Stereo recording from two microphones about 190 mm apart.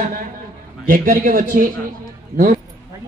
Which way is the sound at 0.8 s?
50° right (ahead or behind).